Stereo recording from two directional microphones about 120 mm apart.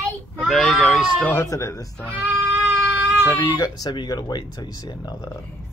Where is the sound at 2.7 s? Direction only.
20° right (ahead or behind).